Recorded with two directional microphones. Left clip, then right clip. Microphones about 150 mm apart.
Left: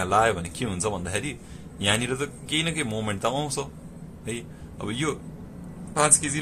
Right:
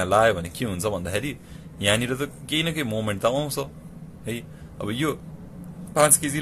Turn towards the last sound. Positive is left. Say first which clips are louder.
# right 3 dB
turn(degrees=-35)  # may be behind; listen again after turning